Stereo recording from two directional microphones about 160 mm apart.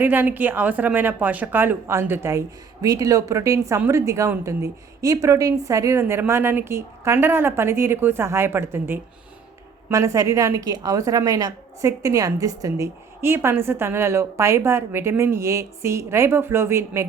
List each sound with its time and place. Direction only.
0.0 s a woman's voice: 10° right (ahead or behind)